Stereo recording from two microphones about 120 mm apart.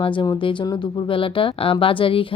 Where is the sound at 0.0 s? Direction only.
45° left (ahead or behind).